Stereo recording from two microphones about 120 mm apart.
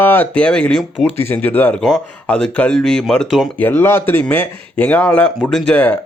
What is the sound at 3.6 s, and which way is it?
Speech, 15° left (ahead or behind).